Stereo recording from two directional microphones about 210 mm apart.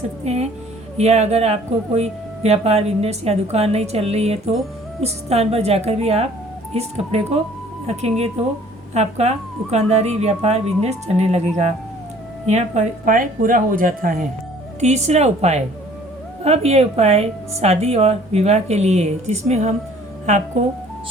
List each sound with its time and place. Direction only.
0.9 s a woman's voice: 30° right (ahead or behind)